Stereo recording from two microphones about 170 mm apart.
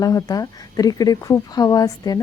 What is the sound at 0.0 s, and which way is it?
Speech, 20° left (ahead or behind).